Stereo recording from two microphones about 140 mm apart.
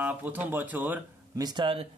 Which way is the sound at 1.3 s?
30° right (ahead or behind).